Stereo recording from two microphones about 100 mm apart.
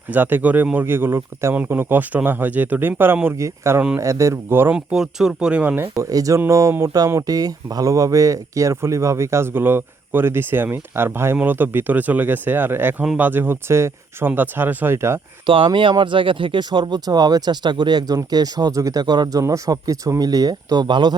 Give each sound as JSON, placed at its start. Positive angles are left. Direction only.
{"t": 0.1, "sound": "speech", "side_deg": -20}
{"t": 4.7, "sound": "speech", "side_deg": -5}
{"t": 15.4, "sound": "speech", "side_deg": -55}